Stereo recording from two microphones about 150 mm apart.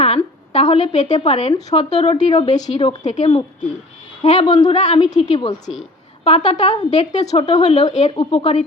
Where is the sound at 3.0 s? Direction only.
50° left (ahead or behind).